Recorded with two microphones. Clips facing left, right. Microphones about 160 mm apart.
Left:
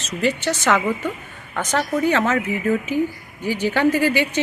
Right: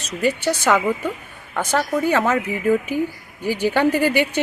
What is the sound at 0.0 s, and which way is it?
A woman's voice, 10° right (ahead or behind).